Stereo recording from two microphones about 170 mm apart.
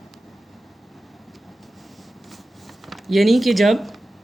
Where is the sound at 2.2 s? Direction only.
Centre (ahead or behind).